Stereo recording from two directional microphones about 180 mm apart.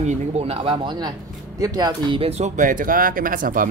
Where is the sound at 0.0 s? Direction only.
30° right (ahead or behind).